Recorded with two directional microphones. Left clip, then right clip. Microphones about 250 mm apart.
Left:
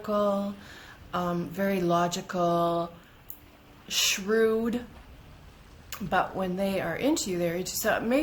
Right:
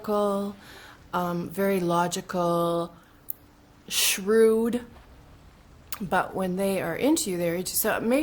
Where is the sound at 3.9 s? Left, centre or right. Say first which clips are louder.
Right 2 dB; right.